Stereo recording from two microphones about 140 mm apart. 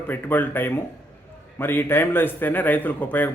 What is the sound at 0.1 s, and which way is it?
Speech, 15° left (ahead or behind).